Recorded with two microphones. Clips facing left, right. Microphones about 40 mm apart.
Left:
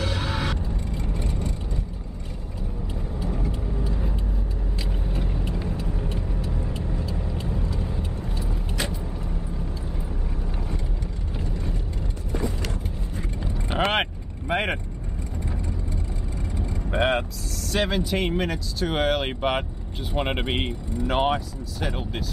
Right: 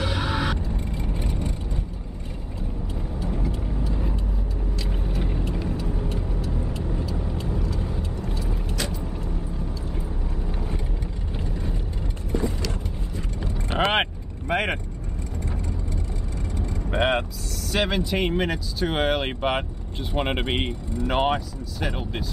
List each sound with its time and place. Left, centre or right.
0.0 s vehicle: right
5.9 s vehicle: centre
7.5 s vehicle: left
13.7 s vehicle: centre
16.9 s vehicle: centre
17.6 s speech: centre